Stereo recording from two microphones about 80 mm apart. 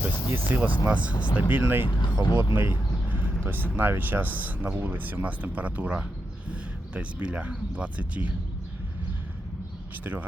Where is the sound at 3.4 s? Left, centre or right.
Right.